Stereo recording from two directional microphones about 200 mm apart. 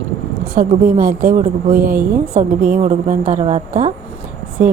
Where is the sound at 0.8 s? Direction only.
45° right (ahead or behind).